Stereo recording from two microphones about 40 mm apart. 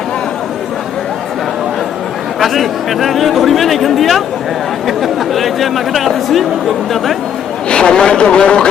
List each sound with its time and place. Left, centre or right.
2.4 s speech: centre
7.7 s speech: left